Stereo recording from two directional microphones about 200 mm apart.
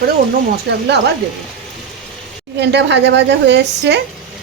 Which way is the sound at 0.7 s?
55° right (ahead or behind).